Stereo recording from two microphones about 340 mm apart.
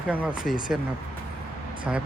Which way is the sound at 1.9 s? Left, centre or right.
Centre.